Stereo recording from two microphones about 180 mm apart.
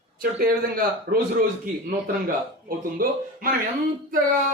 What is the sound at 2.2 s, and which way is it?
Speech, 50° right (ahead or behind).